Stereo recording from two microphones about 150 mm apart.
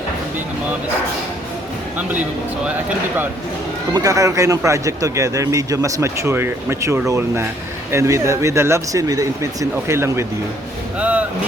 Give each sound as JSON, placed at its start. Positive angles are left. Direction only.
{"t": 3.9, "sound": "speech", "side_deg": -25}
{"t": 11.0, "sound": "vehicle", "side_deg": -10}